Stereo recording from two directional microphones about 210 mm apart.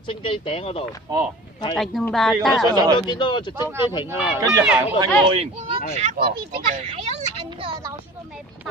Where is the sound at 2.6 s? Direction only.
20° right (ahead or behind).